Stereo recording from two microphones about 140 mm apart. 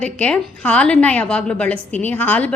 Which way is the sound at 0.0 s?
10° left (ahead or behind).